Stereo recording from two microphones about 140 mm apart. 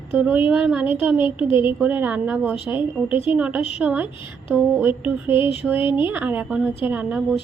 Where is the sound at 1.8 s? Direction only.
10° right (ahead or behind).